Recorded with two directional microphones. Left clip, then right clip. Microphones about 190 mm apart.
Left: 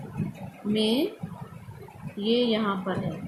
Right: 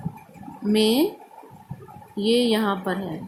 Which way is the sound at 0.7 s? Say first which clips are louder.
Right 5 dB; 55° right (ahead or behind).